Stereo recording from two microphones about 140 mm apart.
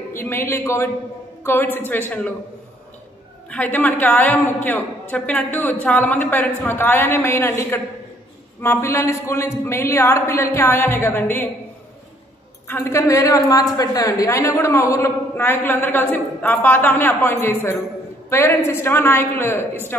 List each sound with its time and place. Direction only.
0.1 s a woman's voice: 15° left (ahead or behind)
3.4 s a woman's voice: 10° left (ahead or behind)
12.6 s a woman's voice: 15° left (ahead or behind)